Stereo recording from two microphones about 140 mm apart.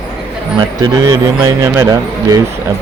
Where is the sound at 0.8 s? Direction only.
30° right (ahead or behind).